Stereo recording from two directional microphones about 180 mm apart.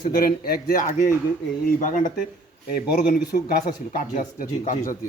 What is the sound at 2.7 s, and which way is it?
Speech, 60° left (ahead or behind).